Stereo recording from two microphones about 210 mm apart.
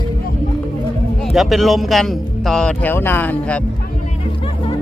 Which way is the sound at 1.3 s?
Centre (ahead or behind).